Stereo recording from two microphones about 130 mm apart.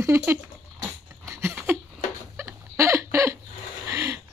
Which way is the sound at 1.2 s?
20° right (ahead or behind).